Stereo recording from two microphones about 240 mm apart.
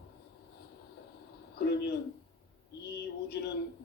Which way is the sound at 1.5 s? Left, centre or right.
Left.